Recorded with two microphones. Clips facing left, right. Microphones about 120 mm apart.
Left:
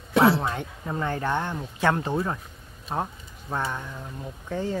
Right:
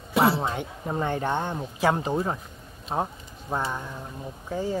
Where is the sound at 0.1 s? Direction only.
Centre (ahead or behind).